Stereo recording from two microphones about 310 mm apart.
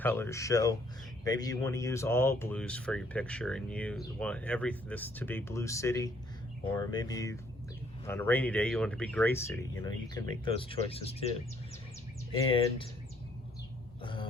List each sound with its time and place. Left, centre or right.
0.0 s speech: centre
12.4 s speech: centre
14.0 s throat clearing: centre